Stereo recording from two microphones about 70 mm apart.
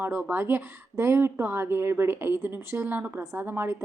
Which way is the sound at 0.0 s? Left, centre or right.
Right.